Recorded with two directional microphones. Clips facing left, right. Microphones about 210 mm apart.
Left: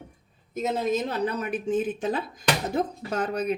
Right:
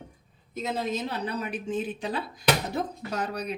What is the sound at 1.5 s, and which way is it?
Speech, 50° left (ahead or behind).